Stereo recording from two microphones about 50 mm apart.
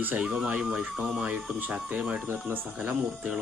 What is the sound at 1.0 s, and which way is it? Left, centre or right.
Speech, centre.